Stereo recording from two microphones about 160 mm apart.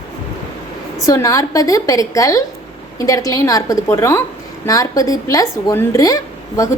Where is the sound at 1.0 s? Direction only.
20° left (ahead or behind).